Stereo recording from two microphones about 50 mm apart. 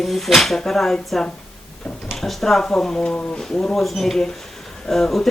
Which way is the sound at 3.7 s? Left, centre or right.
Centre.